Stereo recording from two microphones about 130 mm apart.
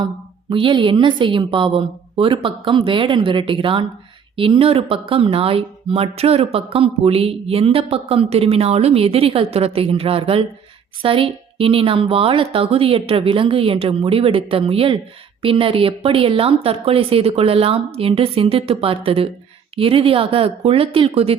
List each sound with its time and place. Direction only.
0.5 s a woman's voice: 40° right (ahead or behind)